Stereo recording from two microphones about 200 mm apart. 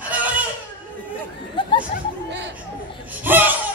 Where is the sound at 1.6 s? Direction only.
25° left (ahead or behind).